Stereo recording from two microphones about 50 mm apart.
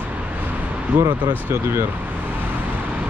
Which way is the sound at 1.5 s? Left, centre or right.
Right.